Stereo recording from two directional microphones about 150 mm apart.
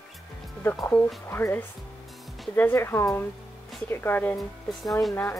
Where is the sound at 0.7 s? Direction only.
15° left (ahead or behind).